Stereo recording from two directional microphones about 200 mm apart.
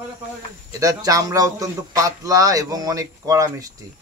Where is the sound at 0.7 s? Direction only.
15° right (ahead or behind).